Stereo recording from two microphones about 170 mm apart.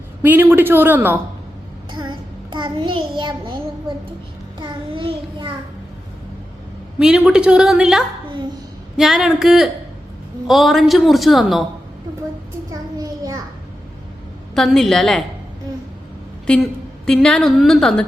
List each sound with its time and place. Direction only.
0.2 s a woman's voice: 15° right (ahead or behind)
1.9 s a child's voice: 25° right (ahead or behind)
4.6 s a child's voice: 30° right (ahead or behind)
7.0 s a man's voice: 5° right (ahead or behind)
12.7 s child singing: 20° right (ahead or behind)
14.5 s a man's voice: centre (ahead or behind)
17.1 s a man's voice: 5° left (ahead or behind)